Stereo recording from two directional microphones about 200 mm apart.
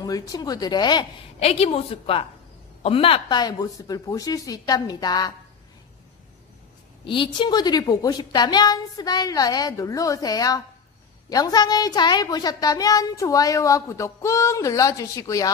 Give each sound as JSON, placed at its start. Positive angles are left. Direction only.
{"t": 0.0, "sound": "a woman's voice", "side_deg": 20}
{"t": 7.1, "sound": "a woman's voice", "side_deg": 25}